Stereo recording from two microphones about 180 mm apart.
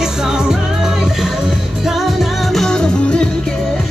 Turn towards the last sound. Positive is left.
turn(degrees=5)  # may be behind; listen again after turning